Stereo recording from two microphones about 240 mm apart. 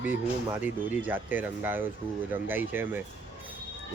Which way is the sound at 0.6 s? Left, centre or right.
Centre.